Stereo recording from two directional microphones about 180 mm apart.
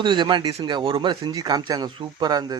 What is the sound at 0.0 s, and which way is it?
Speech, 25° right (ahead or behind).